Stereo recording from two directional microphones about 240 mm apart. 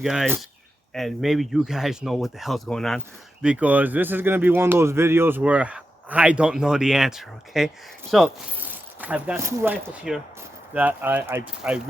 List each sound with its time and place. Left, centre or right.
0.0 s speech: centre